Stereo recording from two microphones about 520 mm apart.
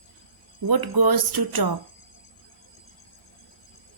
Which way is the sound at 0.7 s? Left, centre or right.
Right.